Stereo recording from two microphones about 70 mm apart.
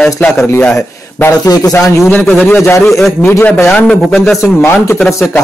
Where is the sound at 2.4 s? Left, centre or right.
Left.